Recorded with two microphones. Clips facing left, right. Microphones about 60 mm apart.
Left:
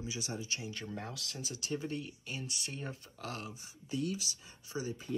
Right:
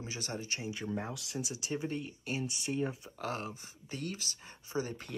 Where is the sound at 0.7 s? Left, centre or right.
Centre.